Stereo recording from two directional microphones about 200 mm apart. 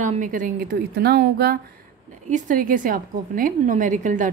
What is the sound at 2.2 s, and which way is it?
A woman's voice, 40° right (ahead or behind).